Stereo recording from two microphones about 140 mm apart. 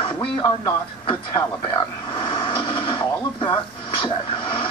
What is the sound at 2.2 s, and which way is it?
Television, 35° left (ahead or behind).